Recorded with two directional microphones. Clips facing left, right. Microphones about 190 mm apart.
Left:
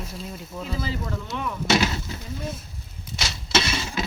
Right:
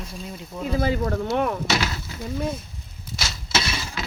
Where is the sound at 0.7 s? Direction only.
55° right (ahead or behind).